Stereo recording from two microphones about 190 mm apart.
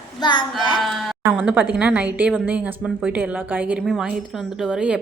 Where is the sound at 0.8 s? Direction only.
Centre (ahead or behind).